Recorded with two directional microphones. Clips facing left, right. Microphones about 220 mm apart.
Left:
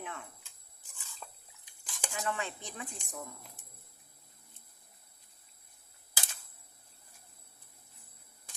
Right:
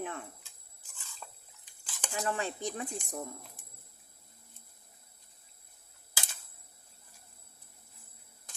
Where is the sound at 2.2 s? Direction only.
35° right (ahead or behind).